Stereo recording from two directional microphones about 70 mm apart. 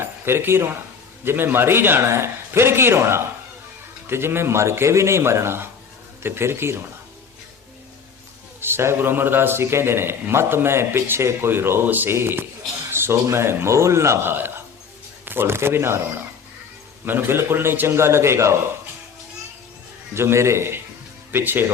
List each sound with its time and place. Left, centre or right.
0.0 s a man's voice: right
8.6 s a man's voice: right
12.9 s a sound: right
13.2 s a man's voice: right
14.3 s a man's voice: right
20.1 s a man's voice: right